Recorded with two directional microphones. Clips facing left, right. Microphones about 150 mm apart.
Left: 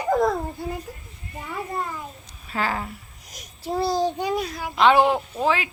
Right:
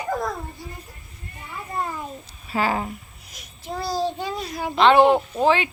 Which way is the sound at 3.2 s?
40° left (ahead or behind).